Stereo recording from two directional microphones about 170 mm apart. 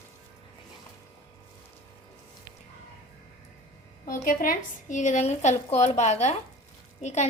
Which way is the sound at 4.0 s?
55° left (ahead or behind).